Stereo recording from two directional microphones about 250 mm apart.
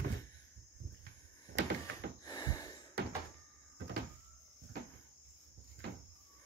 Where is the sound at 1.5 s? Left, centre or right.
Right.